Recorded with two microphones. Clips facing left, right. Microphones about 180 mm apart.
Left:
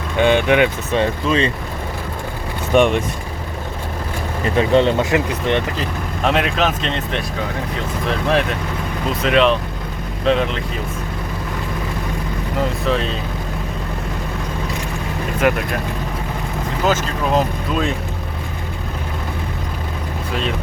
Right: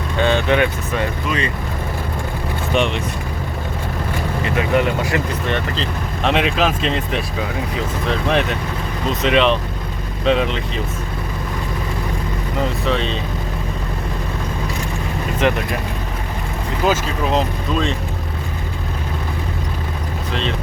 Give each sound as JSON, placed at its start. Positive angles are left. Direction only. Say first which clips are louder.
{"t": 0.2, "sound": "speech", "louder": "left 2 dB", "side_deg": 15}
{"t": 2.7, "sound": "speech", "louder": "left 6 dB", "side_deg": 50}
{"t": 4.5, "sound": "speech", "louder": "left 4 dB", "side_deg": 30}
{"t": 6.3, "sound": "speech", "louder": "right 2 dB", "side_deg": 0}
{"t": 12.8, "sound": "speech", "louder": "even", "side_deg": 0}
{"t": 15.4, "sound": "speech", "louder": "left 1 dB", "side_deg": 5}
{"t": 17.3, "sound": "speech", "louder": "left 2 dB", "side_deg": 5}